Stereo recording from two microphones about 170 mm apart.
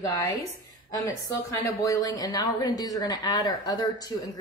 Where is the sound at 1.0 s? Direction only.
20° left (ahead or behind).